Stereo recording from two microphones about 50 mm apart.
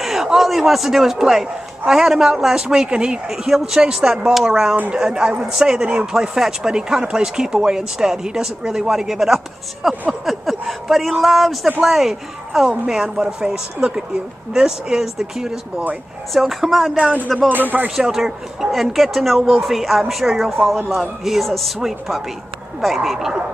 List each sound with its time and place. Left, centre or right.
0.0 s a man's voice: centre
17.5 s speech: right
17.8 s speech: centre